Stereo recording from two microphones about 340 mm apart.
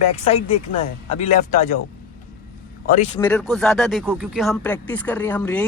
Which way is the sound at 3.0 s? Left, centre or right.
Centre.